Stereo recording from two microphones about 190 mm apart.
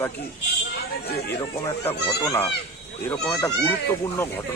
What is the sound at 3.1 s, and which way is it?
Speech, 5° left (ahead or behind).